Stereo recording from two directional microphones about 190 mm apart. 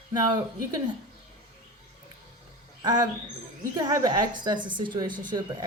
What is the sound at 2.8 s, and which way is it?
A woman's voice, 20° right (ahead or behind).